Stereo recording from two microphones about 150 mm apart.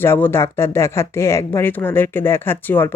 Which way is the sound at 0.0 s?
15° left (ahead or behind).